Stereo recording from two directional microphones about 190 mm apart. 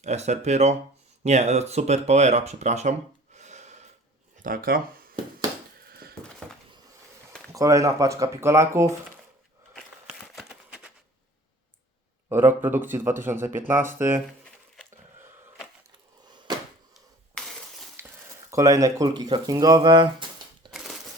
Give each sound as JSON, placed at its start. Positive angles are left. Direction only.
{"t": 0.0, "sound": "speech", "side_deg": -35}
{"t": 3.3, "sound": "rub", "side_deg": -40}
{"t": 4.4, "sound": "speech", "side_deg": -50}
{"t": 5.9, "sound": "a sound", "side_deg": -55}
{"t": 7.5, "sound": "speech", "side_deg": -15}
{"t": 9.7, "sound": "a sound", "side_deg": 0}
{"t": 12.3, "sound": "speech", "side_deg": -10}
{"t": 16.9, "sound": "a sound", "side_deg": 0}
{"t": 18.5, "sound": "speech", "side_deg": -15}
{"t": 20.7, "sound": "crumpling", "side_deg": 0}